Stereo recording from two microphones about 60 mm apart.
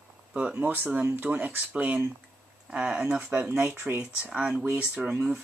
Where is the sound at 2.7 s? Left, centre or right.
Centre.